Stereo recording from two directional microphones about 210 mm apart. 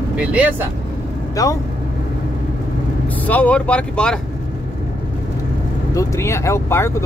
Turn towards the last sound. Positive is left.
turn(degrees=15)  # may be behind; listen again after turning